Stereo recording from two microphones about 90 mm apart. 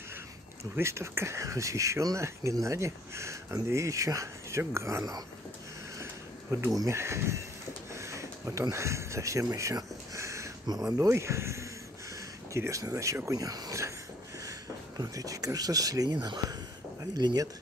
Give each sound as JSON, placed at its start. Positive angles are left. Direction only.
{"t": 0.7, "sound": "speech", "side_deg": -30}
{"t": 6.7, "sound": "speech", "side_deg": -35}
{"t": 7.9, "sound": "a sound", "side_deg": -35}
{"t": 10.7, "sound": "speech", "side_deg": -40}
{"t": 15.0, "sound": "speech", "side_deg": -40}